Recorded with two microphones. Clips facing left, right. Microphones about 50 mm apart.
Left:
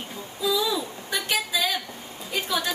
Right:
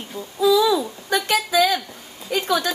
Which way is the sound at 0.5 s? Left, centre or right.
Right.